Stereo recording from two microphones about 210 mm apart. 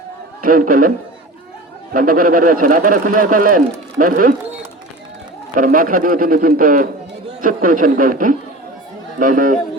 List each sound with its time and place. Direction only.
0.4 s a man's voice: 40° right (ahead or behind)
5.5 s a man's voice: 40° right (ahead or behind)